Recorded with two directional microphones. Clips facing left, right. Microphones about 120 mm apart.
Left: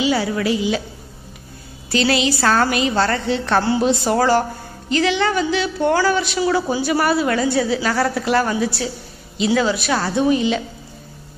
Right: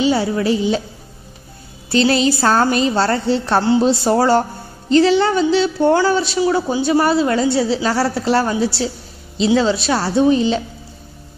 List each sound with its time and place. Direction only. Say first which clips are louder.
0.0 s a woman's voice: right 3 dB; 30° right (ahead or behind)
1.9 s a woman's voice: right 3 dB; 35° right (ahead or behind)